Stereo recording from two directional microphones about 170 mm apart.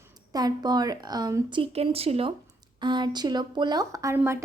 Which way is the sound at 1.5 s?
35° right (ahead or behind).